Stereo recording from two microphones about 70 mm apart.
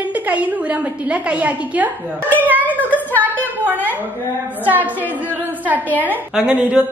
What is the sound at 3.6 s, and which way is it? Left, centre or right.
Speech, right.